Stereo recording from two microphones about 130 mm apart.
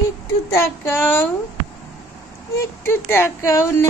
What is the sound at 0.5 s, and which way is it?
Speech, 15° left (ahead or behind).